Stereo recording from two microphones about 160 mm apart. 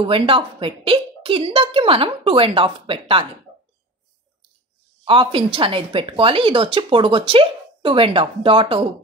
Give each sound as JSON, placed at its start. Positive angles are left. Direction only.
{"t": 0.0, "sound": "a woman's voice", "side_deg": -35}
{"t": 5.0, "sound": "a woman's voice", "side_deg": -35}